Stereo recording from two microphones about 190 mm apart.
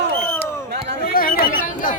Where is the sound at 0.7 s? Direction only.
60° right (ahead or behind).